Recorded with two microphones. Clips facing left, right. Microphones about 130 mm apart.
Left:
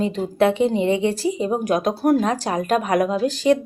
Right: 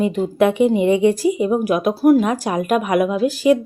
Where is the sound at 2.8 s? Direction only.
40° left (ahead or behind).